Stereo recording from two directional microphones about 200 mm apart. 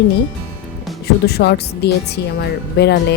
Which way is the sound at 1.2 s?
55° left (ahead or behind).